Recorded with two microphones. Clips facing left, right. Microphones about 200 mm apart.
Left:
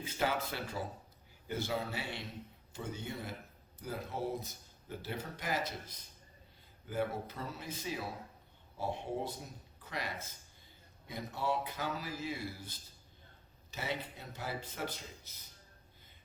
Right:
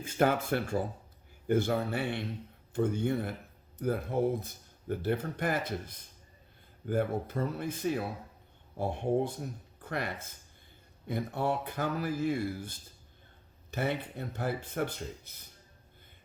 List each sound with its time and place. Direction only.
0.0 s speech: 55° right (ahead or behind)
1.5 s speech: 55° right (ahead or behind)